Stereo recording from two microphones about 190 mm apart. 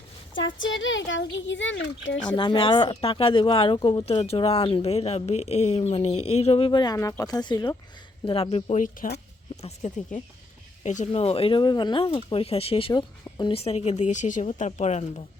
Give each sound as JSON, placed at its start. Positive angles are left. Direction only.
{"t": 0.3, "sound": "speech", "side_deg": 80}
{"t": 2.3, "sound": "speech", "side_deg": 25}
{"t": 13.5, "sound": "speech", "side_deg": 30}